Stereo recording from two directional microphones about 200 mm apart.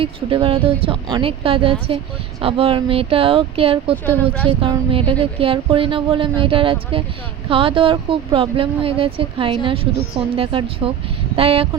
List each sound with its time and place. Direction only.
0.0 s speech: 25° right (ahead or behind)
4.0 s speech: 10° left (ahead or behind)
4.4 s speech: 25° right (ahead or behind)